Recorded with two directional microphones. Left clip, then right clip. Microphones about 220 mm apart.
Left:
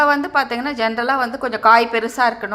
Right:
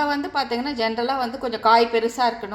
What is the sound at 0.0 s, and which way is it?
A woman's voice, 15° left (ahead or behind).